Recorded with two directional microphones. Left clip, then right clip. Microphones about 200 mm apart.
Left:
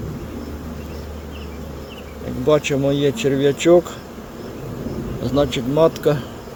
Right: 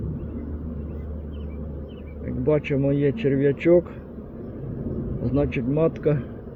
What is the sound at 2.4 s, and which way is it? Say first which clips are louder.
Speech: left 5 dB; 20° left (ahead or behind).